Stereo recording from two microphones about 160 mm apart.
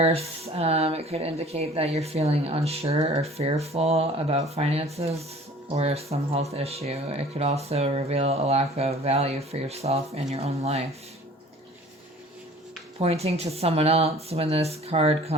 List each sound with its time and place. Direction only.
0.0 s speech: 40° right (ahead or behind)
13.0 s speech: 40° right (ahead or behind)